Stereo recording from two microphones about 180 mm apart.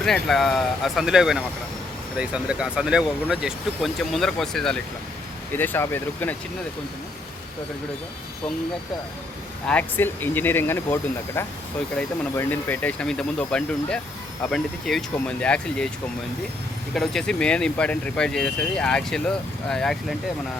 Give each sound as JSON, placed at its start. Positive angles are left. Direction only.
{"t": 0.0, "sound": "speech", "side_deg": 0}
{"t": 9.6, "sound": "speech", "side_deg": 10}
{"t": 16.9, "sound": "speech", "side_deg": 0}